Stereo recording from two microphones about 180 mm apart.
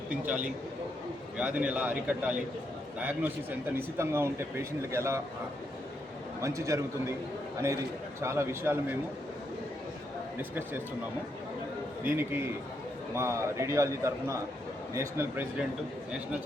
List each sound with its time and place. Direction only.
0.1 s speech: 10° right (ahead or behind)
6.4 s speech: 15° right (ahead or behind)
8.2 s speech: 15° right (ahead or behind)
10.3 s speech: 10° right (ahead or behind)
12.0 s speech: 10° right (ahead or behind)